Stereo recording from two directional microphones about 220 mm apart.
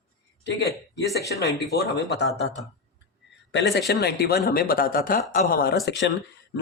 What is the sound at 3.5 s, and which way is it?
Speech, 50° left (ahead or behind).